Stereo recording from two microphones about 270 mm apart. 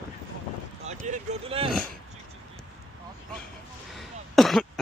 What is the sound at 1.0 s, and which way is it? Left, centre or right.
Speech, right.